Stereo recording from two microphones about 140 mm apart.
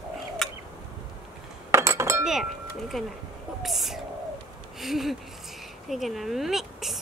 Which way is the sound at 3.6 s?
Centre (ahead or behind).